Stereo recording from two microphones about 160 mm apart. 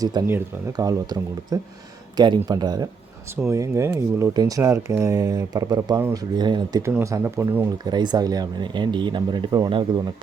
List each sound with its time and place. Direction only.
0.0 s speech: 25° right (ahead or behind)
7.9 s speech: 25° right (ahead or behind)